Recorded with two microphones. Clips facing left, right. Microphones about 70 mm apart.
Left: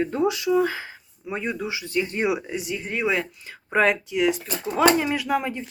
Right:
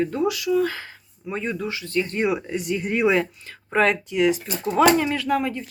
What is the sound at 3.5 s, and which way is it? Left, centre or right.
Speech, centre.